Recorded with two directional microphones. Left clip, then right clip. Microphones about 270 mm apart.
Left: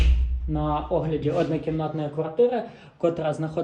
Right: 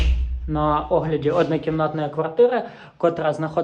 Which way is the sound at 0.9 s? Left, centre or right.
Right.